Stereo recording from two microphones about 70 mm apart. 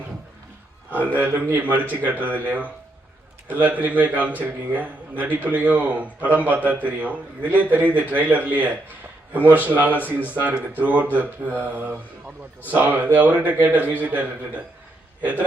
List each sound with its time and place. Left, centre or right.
1.0 s a man's voice: right